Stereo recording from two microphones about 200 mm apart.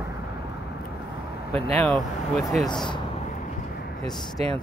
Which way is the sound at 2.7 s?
20° left (ahead or behind).